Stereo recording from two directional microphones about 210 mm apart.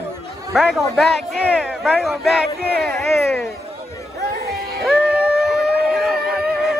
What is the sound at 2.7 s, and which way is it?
Speech, 50° right (ahead or behind).